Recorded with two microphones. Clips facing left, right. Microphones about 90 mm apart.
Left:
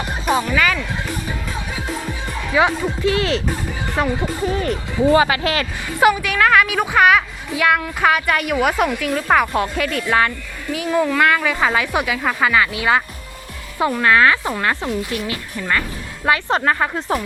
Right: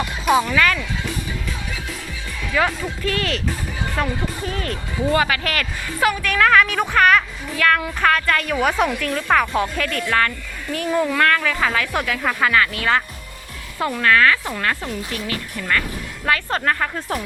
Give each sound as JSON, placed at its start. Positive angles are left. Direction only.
{"t": 0.3, "sound": "speech", "side_deg": 5}
{"t": 2.5, "sound": "speech", "side_deg": 20}
{"t": 6.2, "sound": "speech", "side_deg": 5}
{"t": 10.1, "sound": "speech", "side_deg": 15}
{"t": 10.7, "sound": "speech", "side_deg": 5}